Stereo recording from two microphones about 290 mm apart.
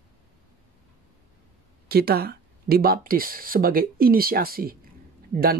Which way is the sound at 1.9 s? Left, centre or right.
Right.